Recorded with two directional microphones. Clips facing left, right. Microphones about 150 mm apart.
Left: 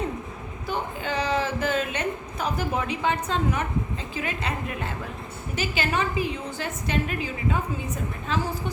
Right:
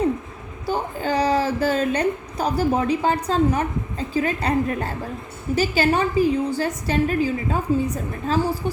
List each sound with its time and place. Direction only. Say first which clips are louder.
0.7 s a woman's voice: right 6 dB; 35° right (ahead or behind)